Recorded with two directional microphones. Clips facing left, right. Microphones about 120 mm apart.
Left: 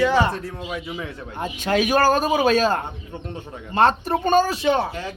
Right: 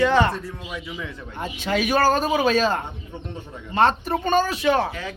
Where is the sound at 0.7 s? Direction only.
50° left (ahead or behind).